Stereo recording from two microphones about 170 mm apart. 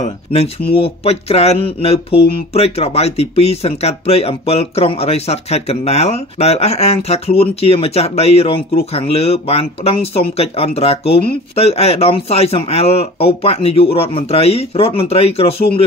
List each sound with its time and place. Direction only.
0.0 s speech: 35° left (ahead or behind)